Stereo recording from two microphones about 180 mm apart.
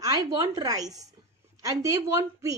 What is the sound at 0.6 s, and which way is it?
A woman's voice, 20° right (ahead or behind).